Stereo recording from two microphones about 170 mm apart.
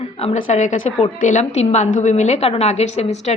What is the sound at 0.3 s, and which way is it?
Speech, 50° left (ahead or behind).